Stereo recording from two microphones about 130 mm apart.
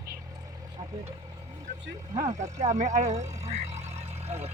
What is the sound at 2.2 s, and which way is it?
Speech, 65° right (ahead or behind).